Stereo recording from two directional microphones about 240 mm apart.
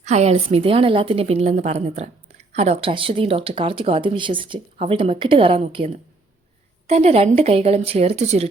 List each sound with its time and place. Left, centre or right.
0.0 s a woman's voice: right